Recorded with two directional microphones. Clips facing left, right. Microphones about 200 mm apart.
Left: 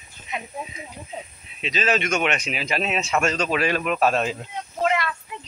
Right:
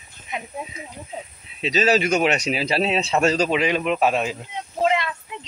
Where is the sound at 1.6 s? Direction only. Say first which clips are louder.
Right 5 dB; 35° right (ahead or behind).